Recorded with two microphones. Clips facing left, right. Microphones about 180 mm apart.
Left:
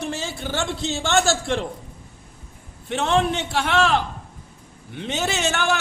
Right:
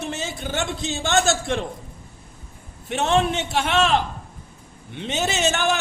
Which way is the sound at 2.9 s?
25° right (ahead or behind).